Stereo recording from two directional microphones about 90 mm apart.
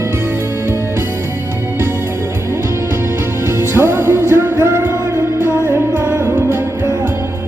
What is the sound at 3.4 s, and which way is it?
Music, 25° right (ahead or behind).